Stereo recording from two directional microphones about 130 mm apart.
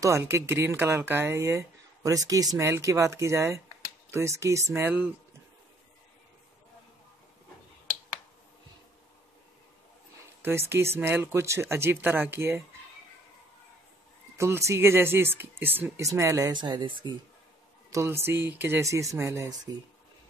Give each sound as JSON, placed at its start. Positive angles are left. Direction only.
{"t": 0.0, "sound": "speech", "side_deg": -20}
{"t": 10.7, "sound": "speech", "side_deg": -20}
{"t": 14.4, "sound": "speech", "side_deg": -20}
{"t": 17.9, "sound": "speech", "side_deg": -20}